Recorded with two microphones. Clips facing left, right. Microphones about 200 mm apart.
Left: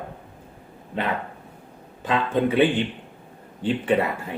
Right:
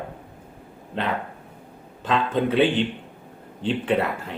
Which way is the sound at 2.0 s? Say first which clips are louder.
Even; 5° left (ahead or behind).